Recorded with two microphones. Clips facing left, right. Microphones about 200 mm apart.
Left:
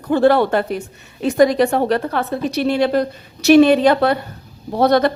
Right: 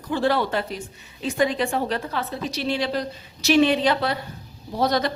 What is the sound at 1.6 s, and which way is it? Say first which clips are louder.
A woman's voice: left 8 dB; 65° left (ahead or behind).